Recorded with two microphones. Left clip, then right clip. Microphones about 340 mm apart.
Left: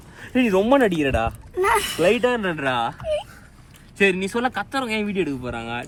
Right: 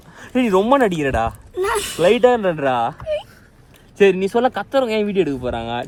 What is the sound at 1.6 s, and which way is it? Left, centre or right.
Speech, centre.